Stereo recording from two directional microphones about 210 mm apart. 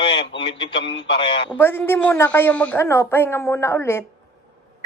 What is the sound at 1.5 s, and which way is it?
A woman's voice, 10° left (ahead or behind).